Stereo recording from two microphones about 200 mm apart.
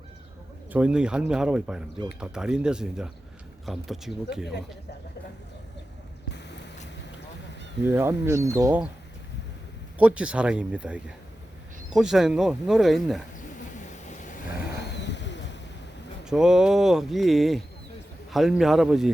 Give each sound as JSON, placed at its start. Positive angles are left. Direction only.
{"t": 0.7, "sound": "speech", "side_deg": -5}
{"t": 7.9, "sound": "speech", "side_deg": -10}
{"t": 10.0, "sound": "speech", "side_deg": -5}
{"t": 14.8, "sound": "bird", "side_deg": 60}
{"t": 16.2, "sound": "speech", "side_deg": -5}